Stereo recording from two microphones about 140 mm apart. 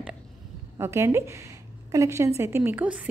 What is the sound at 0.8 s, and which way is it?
A woman's voice, 20° right (ahead or behind).